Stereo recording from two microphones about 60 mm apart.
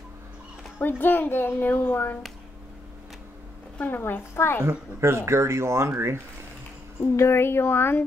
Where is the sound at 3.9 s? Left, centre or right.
Left.